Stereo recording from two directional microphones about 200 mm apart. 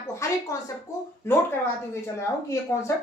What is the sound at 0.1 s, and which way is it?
Speech, 15° left (ahead or behind).